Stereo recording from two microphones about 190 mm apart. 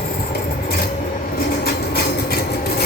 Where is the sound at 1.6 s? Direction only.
55° left (ahead or behind).